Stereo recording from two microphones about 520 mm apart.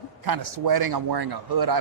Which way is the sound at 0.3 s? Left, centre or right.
Right.